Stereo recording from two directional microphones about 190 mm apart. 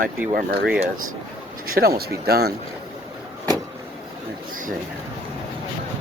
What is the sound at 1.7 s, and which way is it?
Speech, 55° right (ahead or behind).